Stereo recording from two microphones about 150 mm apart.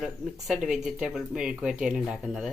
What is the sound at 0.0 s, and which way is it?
Speech, 5° right (ahead or behind).